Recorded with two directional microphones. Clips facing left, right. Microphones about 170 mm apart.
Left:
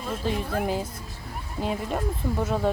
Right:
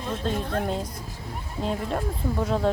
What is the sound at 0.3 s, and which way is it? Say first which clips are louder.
Speech: left 1 dB; 5° left (ahead or behind).